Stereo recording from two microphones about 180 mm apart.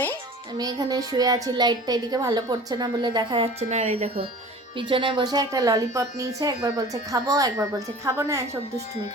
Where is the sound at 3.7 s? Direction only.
40° right (ahead or behind); by 8.4 s 15° right (ahead or behind).